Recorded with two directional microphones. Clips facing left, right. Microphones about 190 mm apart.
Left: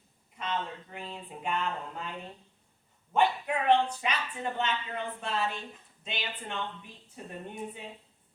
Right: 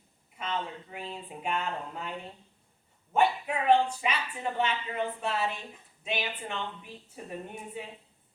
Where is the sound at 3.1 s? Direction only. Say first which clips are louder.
Right 1 dB; 10° right (ahead or behind).